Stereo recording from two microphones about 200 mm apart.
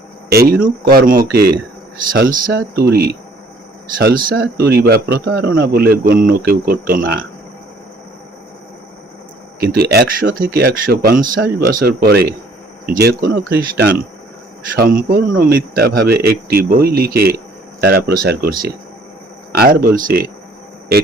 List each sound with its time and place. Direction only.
0.3 s speech: 50° right (ahead or behind)
9.6 s speech: 50° right (ahead or behind)
19.5 s speech: 45° right (ahead or behind)